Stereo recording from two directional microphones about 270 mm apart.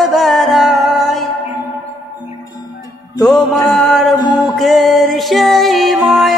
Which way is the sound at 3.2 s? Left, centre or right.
Centre.